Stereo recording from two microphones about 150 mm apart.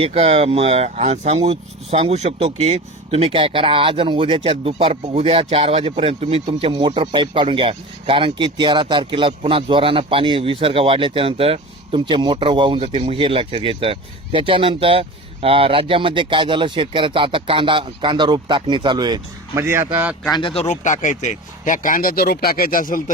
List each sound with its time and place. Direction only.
0.0 s speech: 40° right (ahead or behind)
19.6 s speech: 15° right (ahead or behind)
20.3 s speech: 35° left (ahead or behind); by 23.1 s 65° left (ahead or behind)